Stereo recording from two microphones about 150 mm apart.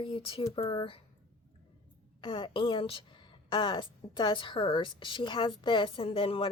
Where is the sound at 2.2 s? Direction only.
35° left (ahead or behind).